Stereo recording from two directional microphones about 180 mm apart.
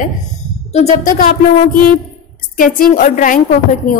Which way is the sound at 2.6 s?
45° left (ahead or behind).